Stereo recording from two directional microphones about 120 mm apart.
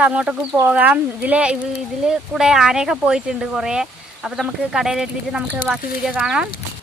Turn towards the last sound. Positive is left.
turn(degrees=-5)  # may be behind; listen again after turning